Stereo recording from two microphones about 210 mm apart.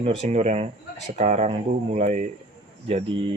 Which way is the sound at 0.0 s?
30° right (ahead or behind).